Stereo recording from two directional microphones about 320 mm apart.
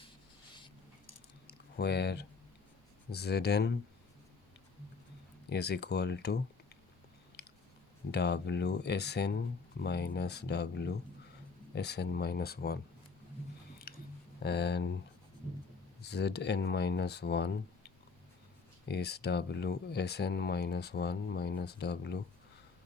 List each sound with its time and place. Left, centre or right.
1.5 s a sound: left
3.1 s speech: left
5.5 s speech: left
7.4 s chewing: left
8.1 s speech: left
13.9 s a sound: left
14.4 s speech: left
16.0 s speech: left